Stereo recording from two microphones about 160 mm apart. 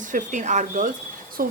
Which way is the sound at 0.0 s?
50° right (ahead or behind).